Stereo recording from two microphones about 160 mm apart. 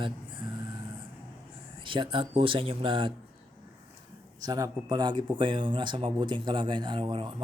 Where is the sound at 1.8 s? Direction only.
30° right (ahead or behind).